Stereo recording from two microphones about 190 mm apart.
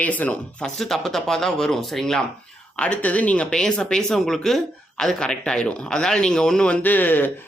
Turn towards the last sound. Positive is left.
turn(degrees=10)  # may be behind; listen again after turning